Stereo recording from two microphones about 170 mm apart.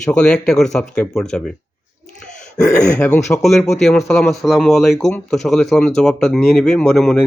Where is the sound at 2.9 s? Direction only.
10° left (ahead or behind).